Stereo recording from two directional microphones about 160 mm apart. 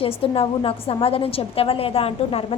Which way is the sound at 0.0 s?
35° left (ahead or behind).